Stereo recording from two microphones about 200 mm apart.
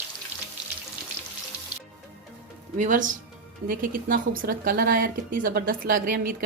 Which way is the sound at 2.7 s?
40° right (ahead or behind).